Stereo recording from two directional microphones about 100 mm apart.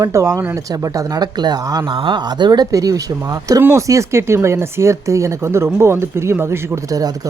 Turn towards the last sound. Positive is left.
turn(degrees=-35)  # may be behind; listen again after turning